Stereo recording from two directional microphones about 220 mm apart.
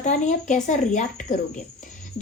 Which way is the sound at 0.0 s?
35° left (ahead or behind).